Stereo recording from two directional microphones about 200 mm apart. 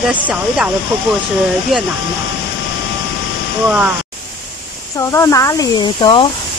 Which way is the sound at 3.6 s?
5° right (ahead or behind).